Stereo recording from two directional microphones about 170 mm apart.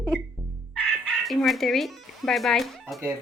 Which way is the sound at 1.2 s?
Centre (ahead or behind).